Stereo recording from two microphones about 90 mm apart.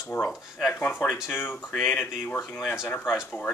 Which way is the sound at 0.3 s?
Centre (ahead or behind).